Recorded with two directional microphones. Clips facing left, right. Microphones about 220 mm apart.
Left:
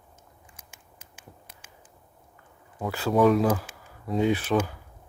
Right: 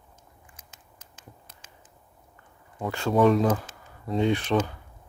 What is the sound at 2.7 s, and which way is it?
Speech, 5° left (ahead or behind).